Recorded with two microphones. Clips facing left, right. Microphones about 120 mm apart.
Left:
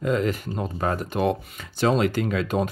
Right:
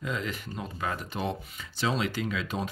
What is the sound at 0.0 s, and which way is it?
Speech, 50° left (ahead or behind).